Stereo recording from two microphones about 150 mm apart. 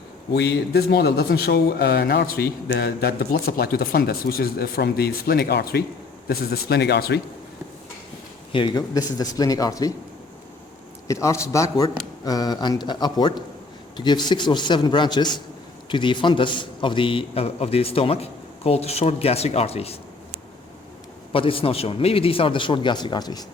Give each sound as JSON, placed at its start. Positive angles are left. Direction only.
{"t": 0.3, "sound": "speech", "side_deg": 90}
{"t": 8.5, "sound": "a man's voice", "side_deg": 30}
{"t": 11.1, "sound": "a man's voice", "side_deg": 20}
{"t": 21.3, "sound": "a man's voice", "side_deg": 35}